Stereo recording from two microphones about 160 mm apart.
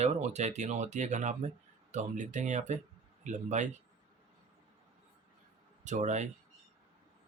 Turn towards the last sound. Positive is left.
turn(degrees=-45)  # may be behind; listen again after turning